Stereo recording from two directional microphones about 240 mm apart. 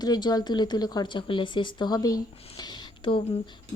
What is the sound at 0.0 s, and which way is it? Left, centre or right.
Speech, centre.